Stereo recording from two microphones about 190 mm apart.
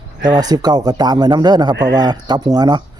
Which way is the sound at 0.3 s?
20° right (ahead or behind).